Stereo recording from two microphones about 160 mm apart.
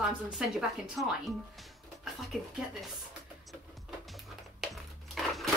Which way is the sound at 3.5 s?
Centre (ahead or behind).